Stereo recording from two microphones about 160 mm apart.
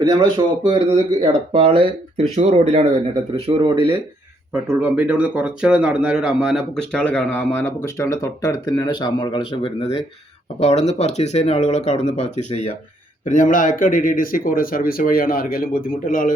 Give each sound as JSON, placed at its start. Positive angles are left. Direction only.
{"t": 0.7, "sound": "speech", "side_deg": -30}
{"t": 3.3, "sound": "speech", "side_deg": -30}
{"t": 4.5, "sound": "speech", "side_deg": -10}